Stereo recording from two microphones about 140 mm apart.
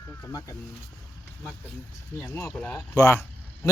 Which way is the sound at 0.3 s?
25° left (ahead or behind).